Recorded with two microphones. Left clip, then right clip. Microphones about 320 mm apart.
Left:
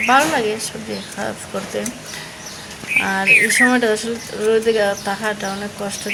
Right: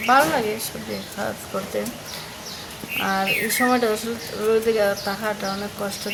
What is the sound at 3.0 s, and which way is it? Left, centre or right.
Speech, right.